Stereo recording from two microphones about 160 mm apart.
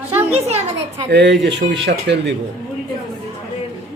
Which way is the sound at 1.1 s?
90° right.